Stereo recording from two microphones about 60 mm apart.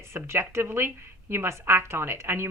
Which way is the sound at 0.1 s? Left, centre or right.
Right.